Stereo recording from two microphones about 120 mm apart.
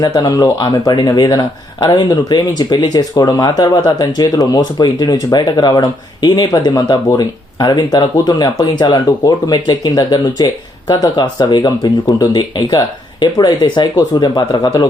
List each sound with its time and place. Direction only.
0.0 s speech: 35° left (ahead or behind)